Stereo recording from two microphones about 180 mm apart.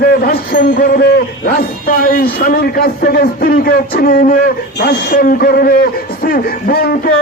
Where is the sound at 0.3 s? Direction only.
50° left (ahead or behind).